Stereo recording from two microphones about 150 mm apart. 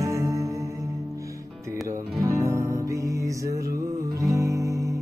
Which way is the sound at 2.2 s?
20° right (ahead or behind).